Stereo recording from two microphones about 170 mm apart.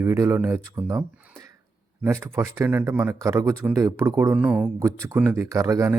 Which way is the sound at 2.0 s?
15° right (ahead or behind).